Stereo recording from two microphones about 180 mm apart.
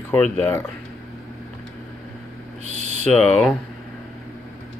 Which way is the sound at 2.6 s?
40° right (ahead or behind).